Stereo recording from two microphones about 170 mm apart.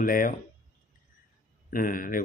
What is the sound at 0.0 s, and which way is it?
Speech, 55° left (ahead or behind).